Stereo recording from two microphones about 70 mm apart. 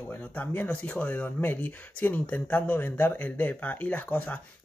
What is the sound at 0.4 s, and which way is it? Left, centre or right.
Speech, left.